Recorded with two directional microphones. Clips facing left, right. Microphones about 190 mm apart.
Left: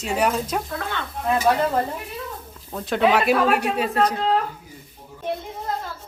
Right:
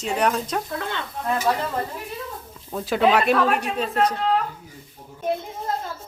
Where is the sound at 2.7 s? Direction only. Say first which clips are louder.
Even; 5° right (ahead or behind).